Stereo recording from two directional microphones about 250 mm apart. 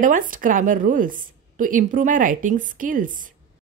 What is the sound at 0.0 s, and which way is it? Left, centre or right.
A woman's voice, right.